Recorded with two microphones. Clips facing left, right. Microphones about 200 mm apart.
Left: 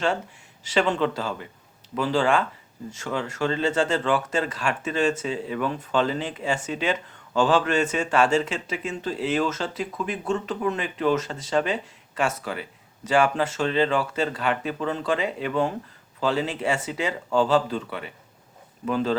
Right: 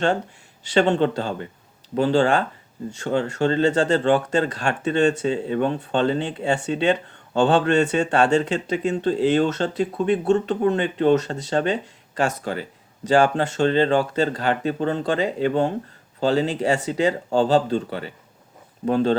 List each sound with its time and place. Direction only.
0.7 s speech: 30° right (ahead or behind)